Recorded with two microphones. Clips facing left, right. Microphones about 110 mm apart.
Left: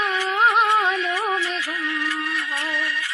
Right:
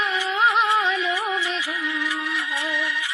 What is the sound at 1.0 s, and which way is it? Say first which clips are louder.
Music: left 1 dB; 10° right (ahead or behind).